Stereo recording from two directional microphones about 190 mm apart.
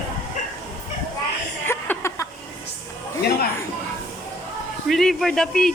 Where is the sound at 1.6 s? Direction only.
10° left (ahead or behind).